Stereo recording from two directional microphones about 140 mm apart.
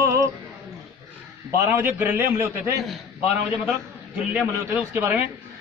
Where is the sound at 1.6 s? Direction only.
10° right (ahead or behind).